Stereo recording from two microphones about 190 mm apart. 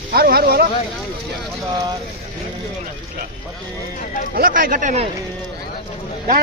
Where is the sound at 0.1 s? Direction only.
50° right (ahead or behind).